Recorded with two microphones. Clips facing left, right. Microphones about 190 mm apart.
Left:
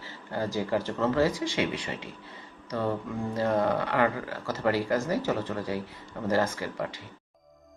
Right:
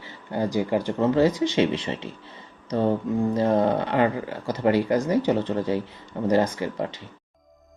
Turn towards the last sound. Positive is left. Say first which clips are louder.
# right 5 dB
turn(degrees=-25)  # may be behind; listen again after turning